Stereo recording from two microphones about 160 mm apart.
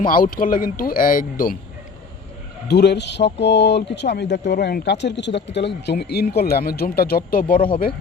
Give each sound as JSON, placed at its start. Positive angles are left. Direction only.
{"t": 0.0, "sound": "speech", "side_deg": 60}
{"t": 2.6, "sound": "speech", "side_deg": 90}